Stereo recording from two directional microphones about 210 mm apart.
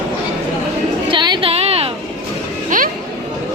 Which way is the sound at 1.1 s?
20° right (ahead or behind).